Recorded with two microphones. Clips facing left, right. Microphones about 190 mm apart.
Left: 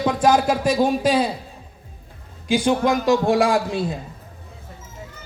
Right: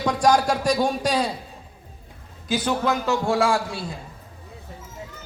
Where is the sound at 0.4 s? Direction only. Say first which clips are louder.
Left 3 dB; 5° left (ahead or behind).